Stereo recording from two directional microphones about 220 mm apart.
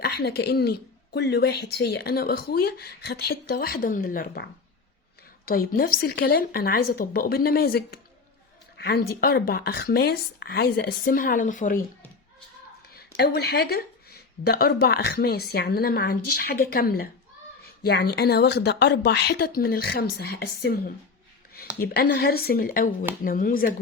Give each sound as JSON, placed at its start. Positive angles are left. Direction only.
{"t": 0.0, "sound": "speech", "side_deg": 45}
{"t": 5.5, "sound": "speech", "side_deg": 40}
{"t": 13.0, "sound": "speech", "side_deg": 45}